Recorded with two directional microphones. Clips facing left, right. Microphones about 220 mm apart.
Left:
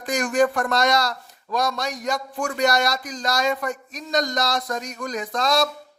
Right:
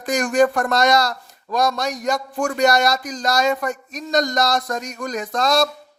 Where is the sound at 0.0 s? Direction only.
45° right (ahead or behind).